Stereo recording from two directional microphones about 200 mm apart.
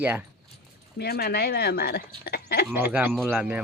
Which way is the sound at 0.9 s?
50° left (ahead or behind).